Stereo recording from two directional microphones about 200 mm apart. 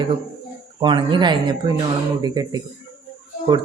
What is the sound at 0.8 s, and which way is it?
Speech, 25° right (ahead or behind).